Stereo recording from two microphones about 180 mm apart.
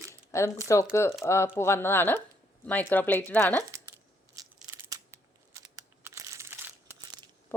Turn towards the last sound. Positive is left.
turn(degrees=-15)  # may be behind; listen again after turning